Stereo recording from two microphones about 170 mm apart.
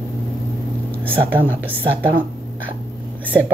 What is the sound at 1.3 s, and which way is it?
Speech, 10° right (ahead or behind).